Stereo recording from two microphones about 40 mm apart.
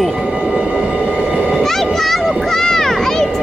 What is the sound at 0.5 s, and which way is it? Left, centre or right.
Train, right.